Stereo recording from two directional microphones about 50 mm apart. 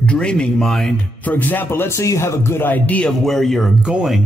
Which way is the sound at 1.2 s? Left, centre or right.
Left.